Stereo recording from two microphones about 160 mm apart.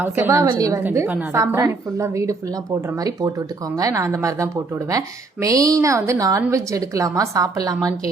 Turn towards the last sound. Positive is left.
turn(degrees=-25)  # may be behind; listen again after turning